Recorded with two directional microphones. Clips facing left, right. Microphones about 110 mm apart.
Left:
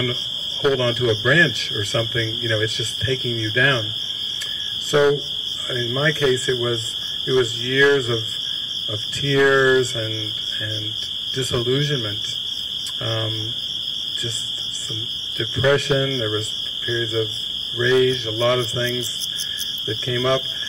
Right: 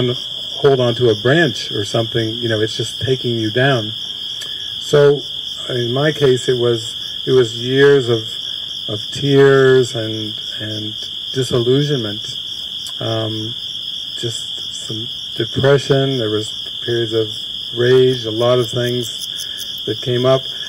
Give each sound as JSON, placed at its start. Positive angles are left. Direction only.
{"t": 0.0, "sound": "speech", "side_deg": -30}
{"t": 2.8, "sound": "speech", "side_deg": -40}
{"t": 3.3, "sound": "speech", "side_deg": -30}
{"t": 4.9, "sound": "speech", "side_deg": -25}
{"t": 9.2, "sound": "speech", "side_deg": -25}
{"t": 11.3, "sound": "speech", "side_deg": -25}
{"t": 13.1, "sound": "speech", "side_deg": -35}
{"t": 15.3, "sound": "speech", "side_deg": -30}
{"t": 18.2, "sound": "speech", "side_deg": -20}
{"t": 19.9, "sound": "speech", "side_deg": -40}